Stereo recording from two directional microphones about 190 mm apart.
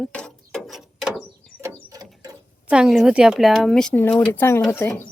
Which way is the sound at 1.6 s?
20° right (ahead or behind).